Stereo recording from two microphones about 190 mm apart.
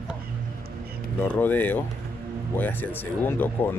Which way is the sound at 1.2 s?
10° left (ahead or behind).